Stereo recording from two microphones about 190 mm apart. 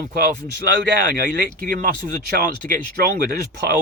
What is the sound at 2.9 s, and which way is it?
Speech, 55° right (ahead or behind).